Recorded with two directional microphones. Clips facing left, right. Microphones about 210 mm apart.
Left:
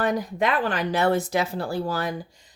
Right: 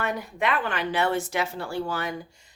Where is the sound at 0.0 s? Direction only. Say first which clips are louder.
Left 4 dB; 35° left (ahead or behind).